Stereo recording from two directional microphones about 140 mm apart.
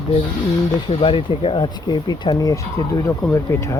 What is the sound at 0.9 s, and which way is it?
Speech, 40° left (ahead or behind).